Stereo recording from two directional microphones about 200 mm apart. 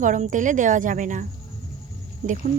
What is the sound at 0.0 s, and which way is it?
Speech, 40° right (ahead or behind).